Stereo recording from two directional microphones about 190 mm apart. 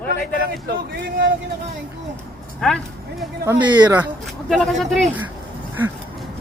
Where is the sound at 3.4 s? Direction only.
20° right (ahead or behind).